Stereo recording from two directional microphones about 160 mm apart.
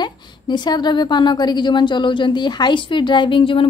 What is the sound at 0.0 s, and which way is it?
A woman's voice, 25° left (ahead or behind).